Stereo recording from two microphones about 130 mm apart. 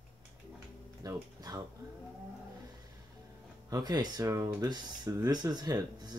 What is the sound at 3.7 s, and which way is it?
Speech, 30° right (ahead or behind).